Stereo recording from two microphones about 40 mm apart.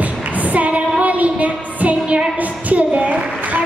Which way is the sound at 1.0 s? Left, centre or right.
Right.